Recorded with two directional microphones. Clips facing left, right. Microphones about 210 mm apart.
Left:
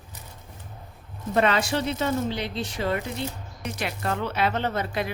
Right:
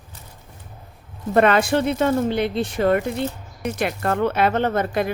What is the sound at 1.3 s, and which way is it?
A woman's voice, 55° right (ahead or behind).